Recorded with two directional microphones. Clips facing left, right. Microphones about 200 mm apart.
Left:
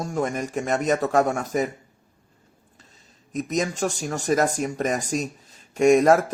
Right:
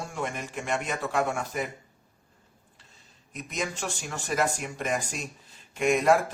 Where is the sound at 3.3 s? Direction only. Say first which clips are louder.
Left 8 dB; 40° left (ahead or behind).